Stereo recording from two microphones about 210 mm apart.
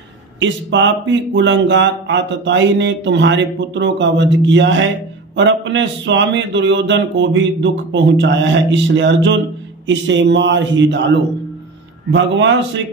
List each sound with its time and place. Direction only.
0.4 s speech: 60° right (ahead or behind)
12.1 s speech: 60° right (ahead or behind)